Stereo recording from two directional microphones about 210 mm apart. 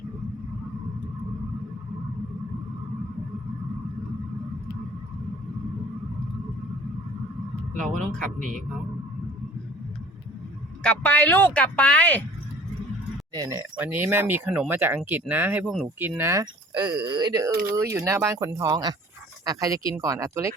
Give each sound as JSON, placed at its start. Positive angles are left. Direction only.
{"t": 7.9, "sound": "speech", "side_deg": 5}
{"t": 8.4, "sound": "a man's voice", "side_deg": -35}
{"t": 10.8, "sound": "speech", "side_deg": 10}
{"t": 13.3, "sound": "speech", "side_deg": -15}
{"t": 17.5, "sound": "speech", "side_deg": -45}
{"t": 17.7, "sound": "speech", "side_deg": -15}